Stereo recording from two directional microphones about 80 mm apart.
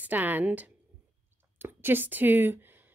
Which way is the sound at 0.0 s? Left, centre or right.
Right.